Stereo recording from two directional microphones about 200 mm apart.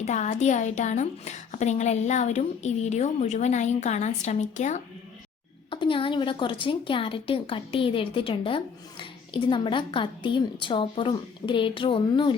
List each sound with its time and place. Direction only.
0.0 s a woman's voice: 35° left (ahead or behind)
5.7 s a woman's voice: 25° left (ahead or behind)